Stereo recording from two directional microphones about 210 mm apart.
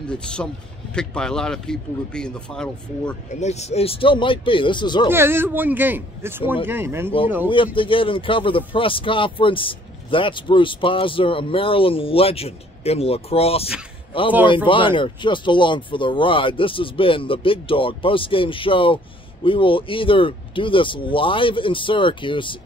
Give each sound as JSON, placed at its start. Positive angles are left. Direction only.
{"t": 0.1, "sound": "speech", "side_deg": 5}
{"t": 3.3, "sound": "speech", "side_deg": 35}
{"t": 5.1, "sound": "speech", "side_deg": -10}
{"t": 7.4, "sound": "speech", "side_deg": 25}